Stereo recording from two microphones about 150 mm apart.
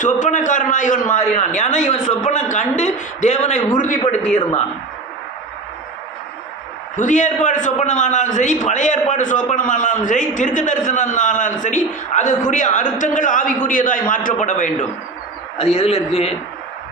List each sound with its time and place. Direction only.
0.0 s a man's voice: 55° left (ahead or behind)
6.9 s a man's voice: 55° left (ahead or behind)
15.5 s a woman's voice: 45° left (ahead or behind)